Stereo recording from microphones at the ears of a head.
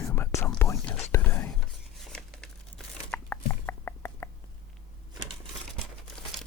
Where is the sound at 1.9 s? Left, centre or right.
Centre.